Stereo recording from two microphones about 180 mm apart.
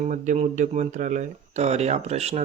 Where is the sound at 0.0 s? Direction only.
40° right (ahead or behind).